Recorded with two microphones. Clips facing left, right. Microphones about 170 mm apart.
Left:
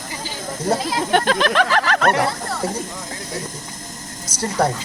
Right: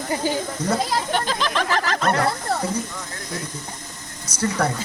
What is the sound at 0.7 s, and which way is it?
Speech, 65° left (ahead or behind).